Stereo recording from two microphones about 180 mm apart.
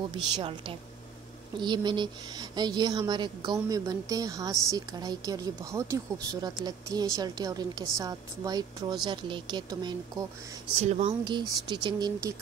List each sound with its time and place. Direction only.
0.1 s a woman's voice: 30° right (ahead or behind)
10.8 s speech: 40° right (ahead or behind)
11.2 s a woman's voice: 25° right (ahead or behind)